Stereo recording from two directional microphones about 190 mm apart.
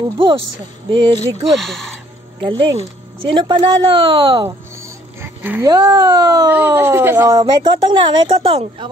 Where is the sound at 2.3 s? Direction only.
25° right (ahead or behind).